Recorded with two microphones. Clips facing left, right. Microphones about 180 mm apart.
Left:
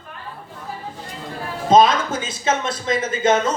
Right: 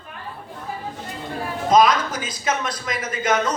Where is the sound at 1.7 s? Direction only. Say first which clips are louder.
Left 2 dB; 25° left (ahead or behind).